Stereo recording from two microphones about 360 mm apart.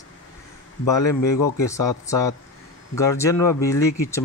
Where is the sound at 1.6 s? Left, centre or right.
Centre.